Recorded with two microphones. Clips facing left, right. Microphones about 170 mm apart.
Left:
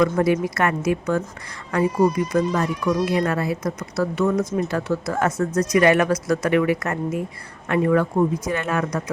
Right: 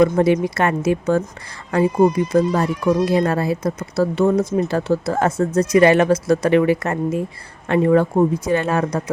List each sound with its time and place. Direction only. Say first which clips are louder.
0.0 s speech: right 4 dB; 25° right (ahead or behind)